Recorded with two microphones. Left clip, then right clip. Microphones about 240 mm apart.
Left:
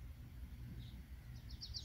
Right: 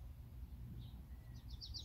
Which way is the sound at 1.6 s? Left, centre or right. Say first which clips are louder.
Left 1 dB; right.